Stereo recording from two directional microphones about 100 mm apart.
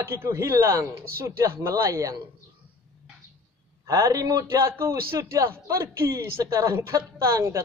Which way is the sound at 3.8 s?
35° right (ahead or behind).